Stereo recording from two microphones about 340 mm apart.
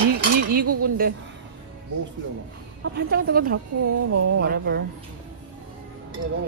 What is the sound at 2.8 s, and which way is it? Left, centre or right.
Speech, right.